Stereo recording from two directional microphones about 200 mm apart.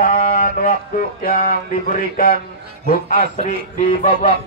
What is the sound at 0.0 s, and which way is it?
Music, 50° left (ahead or behind).